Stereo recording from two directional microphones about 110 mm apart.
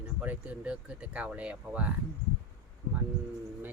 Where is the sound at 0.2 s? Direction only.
10° right (ahead or behind).